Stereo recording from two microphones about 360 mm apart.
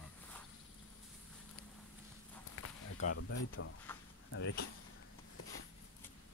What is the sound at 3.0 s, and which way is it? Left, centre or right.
Speech, left.